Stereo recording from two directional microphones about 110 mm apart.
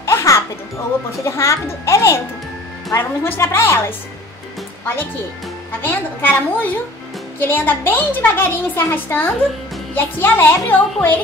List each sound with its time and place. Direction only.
0.0 s music: 25° left (ahead or behind)
1.2 s speech: 25° left (ahead or behind)
5.8 s a woman's voice: 15° left (ahead or behind)